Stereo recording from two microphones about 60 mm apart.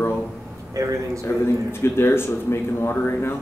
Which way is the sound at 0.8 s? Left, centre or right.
Right.